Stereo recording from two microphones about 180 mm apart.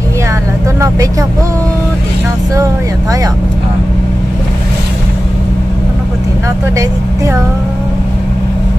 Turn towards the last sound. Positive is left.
turn(degrees=-15)  # may be behind; listen again after turning